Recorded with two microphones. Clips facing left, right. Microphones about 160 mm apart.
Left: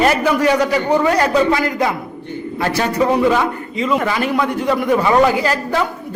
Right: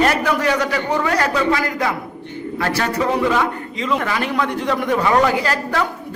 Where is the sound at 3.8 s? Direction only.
5° left (ahead or behind).